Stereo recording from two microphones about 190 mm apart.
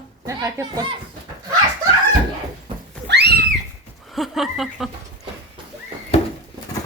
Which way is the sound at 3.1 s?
60° right (ahead or behind).